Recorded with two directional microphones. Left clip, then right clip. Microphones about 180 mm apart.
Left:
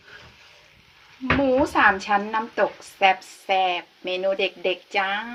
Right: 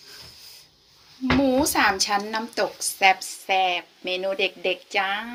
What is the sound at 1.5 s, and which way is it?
Speech, 20° right (ahead or behind).